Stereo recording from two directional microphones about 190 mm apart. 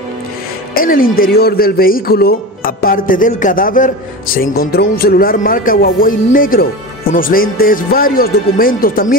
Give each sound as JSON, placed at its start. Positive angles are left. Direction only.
{"t": 0.7, "sound": "speech", "side_deg": 50}